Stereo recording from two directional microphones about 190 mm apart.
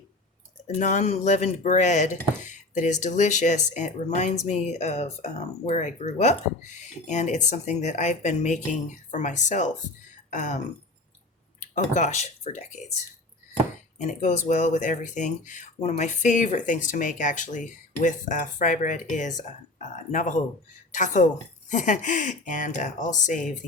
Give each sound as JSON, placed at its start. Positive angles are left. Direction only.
{"t": 0.8, "sound": "speech", "side_deg": 40}
{"t": 11.6, "sound": "speech", "side_deg": 40}
{"t": 14.0, "sound": "speech", "side_deg": 40}